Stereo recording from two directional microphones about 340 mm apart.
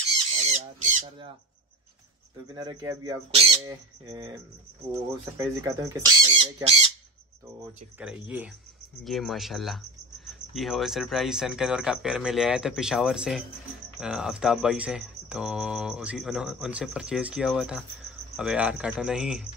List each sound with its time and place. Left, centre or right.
0.4 s speech: centre
2.5 s speech: centre
5.4 s speech: centre
7.6 s speech: centre